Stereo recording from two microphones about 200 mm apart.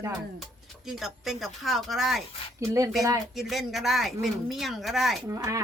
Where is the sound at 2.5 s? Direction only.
15° right (ahead or behind).